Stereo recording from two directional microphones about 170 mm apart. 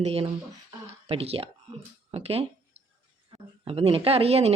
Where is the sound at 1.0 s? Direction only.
35° right (ahead or behind).